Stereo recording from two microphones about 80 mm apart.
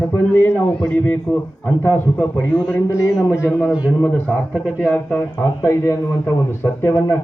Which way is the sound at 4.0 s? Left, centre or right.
Centre.